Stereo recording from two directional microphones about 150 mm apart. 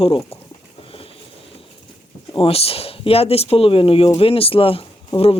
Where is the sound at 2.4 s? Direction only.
40° left (ahead or behind).